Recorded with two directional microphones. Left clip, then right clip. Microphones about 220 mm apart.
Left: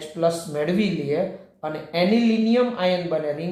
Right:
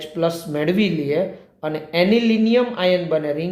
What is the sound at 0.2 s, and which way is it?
Speech, 45° right (ahead or behind).